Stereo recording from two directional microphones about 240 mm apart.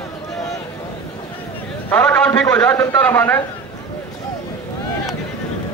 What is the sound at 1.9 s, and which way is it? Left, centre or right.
A man's voice, centre.